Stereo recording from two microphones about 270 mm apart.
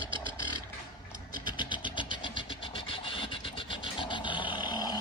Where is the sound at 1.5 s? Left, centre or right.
Centre.